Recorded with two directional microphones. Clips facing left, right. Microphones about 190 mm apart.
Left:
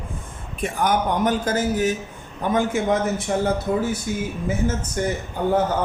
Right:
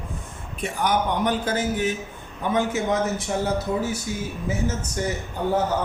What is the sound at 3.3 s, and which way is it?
Speech, 55° left (ahead or behind).